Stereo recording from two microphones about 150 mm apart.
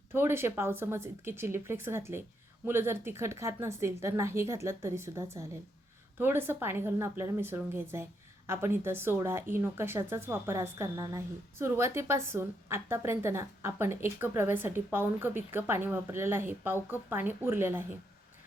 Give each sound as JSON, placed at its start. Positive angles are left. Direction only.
{"t": 0.1, "sound": "a woman's voice", "side_deg": -15}